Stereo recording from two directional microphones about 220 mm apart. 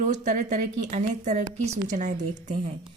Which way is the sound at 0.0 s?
35° right (ahead or behind).